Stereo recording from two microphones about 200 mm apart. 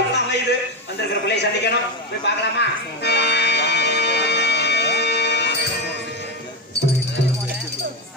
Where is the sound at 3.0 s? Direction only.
55° left (ahead or behind).